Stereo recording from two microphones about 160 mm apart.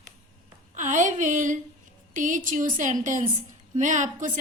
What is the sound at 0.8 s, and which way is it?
A woman's voice, 50° right (ahead or behind).